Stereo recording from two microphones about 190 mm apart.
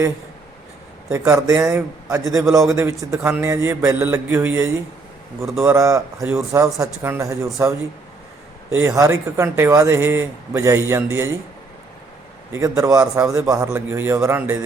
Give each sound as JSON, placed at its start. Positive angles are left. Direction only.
{"t": 1.1, "sound": "speech", "side_deg": -15}
{"t": 12.5, "sound": "speech", "side_deg": -15}